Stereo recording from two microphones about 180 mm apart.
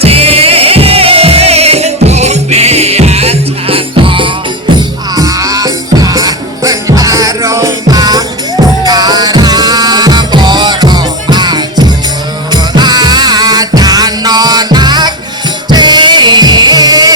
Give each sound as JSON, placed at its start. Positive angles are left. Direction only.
{"t": 0.0, "sound": "music", "side_deg": -35}